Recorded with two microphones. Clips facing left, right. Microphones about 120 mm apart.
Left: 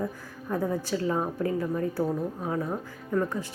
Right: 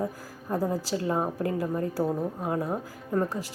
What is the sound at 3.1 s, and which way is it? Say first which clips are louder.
Speech: even; 30° right (ahead or behind).